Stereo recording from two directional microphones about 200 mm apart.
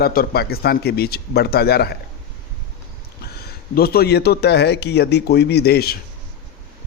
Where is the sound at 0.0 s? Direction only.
50° left (ahead or behind).